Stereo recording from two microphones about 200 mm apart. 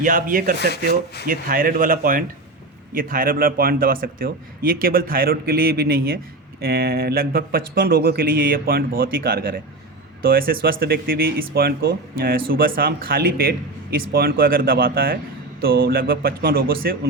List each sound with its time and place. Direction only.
0.0 s speech: 45° right (ahead or behind)